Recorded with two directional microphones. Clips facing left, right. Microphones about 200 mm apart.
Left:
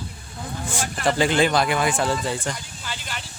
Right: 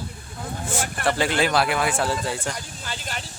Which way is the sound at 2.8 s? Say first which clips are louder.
Right 1 dB; 45° right (ahead or behind).